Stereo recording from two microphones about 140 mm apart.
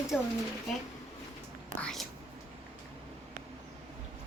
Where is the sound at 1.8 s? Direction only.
5° left (ahead or behind).